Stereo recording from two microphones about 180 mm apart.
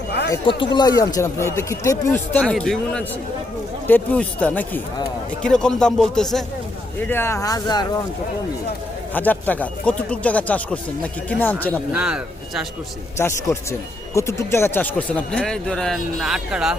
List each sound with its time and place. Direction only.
0.4 s speech: 25° left (ahead or behind)
9.1 s speech: 10° left (ahead or behind)
11.9 s speech: 5° right (ahead or behind)
13.1 s speech: 15° left (ahead or behind); by 16.7 s 5° right (ahead or behind)